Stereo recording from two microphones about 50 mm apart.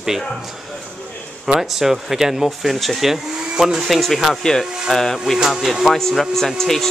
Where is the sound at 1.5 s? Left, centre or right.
Centre.